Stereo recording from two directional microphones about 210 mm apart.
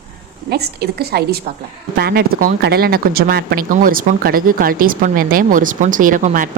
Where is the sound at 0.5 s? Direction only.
50° right (ahead or behind).